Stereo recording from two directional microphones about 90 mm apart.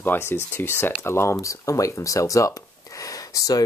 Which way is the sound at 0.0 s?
25° left (ahead or behind).